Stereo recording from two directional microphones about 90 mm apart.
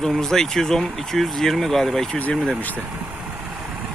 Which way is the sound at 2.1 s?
15° left (ahead or behind).